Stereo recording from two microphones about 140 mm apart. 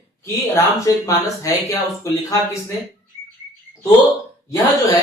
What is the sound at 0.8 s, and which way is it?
Speech, 25° left (ahead or behind).